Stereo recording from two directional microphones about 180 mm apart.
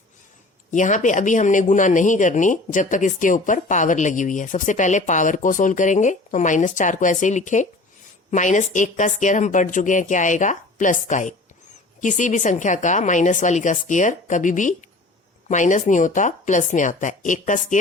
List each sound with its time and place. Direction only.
0.7 s speech: 45° left (ahead or behind)